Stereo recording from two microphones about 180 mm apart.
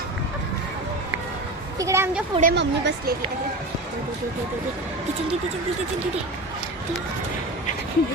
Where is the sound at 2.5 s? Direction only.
75° right (ahead or behind).